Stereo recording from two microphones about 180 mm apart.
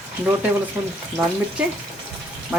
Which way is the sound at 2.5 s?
5° right (ahead or behind).